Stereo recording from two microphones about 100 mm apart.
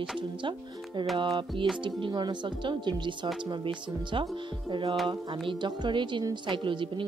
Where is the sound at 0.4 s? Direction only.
55° right (ahead or behind).